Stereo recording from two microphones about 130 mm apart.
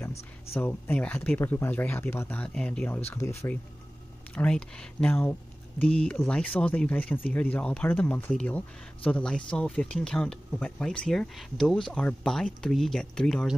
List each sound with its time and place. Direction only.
0.6 s speech: 15° left (ahead or behind)
3.1 s speech: 20° left (ahead or behind)
4.3 s speech: 5° left (ahead or behind)